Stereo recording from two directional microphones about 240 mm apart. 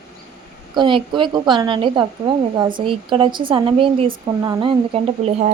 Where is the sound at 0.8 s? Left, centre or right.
Centre.